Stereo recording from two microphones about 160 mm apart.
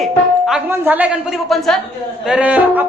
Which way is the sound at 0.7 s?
10° right (ahead or behind).